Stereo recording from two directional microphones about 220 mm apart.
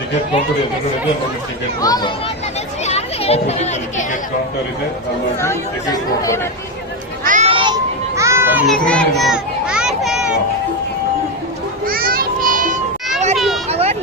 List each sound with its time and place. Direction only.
1.8 s speech: 20° left (ahead or behind)
2.8 s a child's voice: 30° left (ahead or behind)
5.4 s speech: 15° left (ahead or behind)
7.3 s children playing: 30° right (ahead or behind); by 10.3 s centre (ahead or behind)
11.9 s children playing: 40° right (ahead or behind)
13.3 s a sound: centre (ahead or behind)
13.7 s a sound: 30° right (ahead or behind)